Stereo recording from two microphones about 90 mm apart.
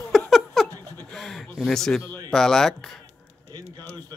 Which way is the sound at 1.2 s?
5° left (ahead or behind).